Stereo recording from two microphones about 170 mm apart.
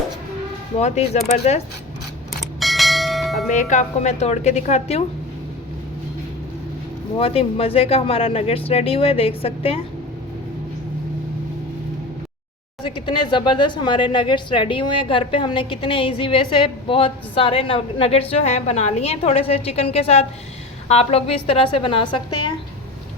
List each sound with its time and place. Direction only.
0.8 s speech: 40° left (ahead or behind)
2.4 s bell: centre (ahead or behind)
3.5 s speech: 45° left (ahead or behind)
7.2 s speech: 35° left (ahead or behind)
12.8 s speech: 30° left (ahead or behind)